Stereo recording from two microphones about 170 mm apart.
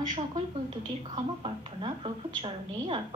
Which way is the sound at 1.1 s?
30° right (ahead or behind).